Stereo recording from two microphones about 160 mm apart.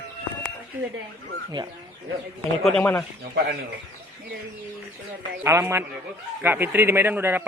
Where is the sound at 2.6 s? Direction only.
5° left (ahead or behind).